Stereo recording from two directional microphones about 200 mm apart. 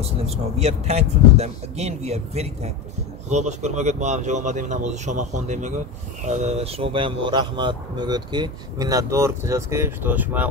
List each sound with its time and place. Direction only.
0.0 s speech: 30° right (ahead or behind); by 10.5 s 10° right (ahead or behind)